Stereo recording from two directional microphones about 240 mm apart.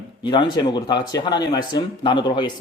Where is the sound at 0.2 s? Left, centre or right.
Centre.